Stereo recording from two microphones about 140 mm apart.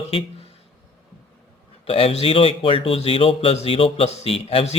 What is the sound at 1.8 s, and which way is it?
Speech, 45° left (ahead or behind).